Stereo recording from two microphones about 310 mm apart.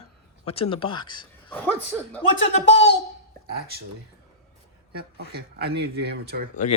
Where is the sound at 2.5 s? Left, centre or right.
Left.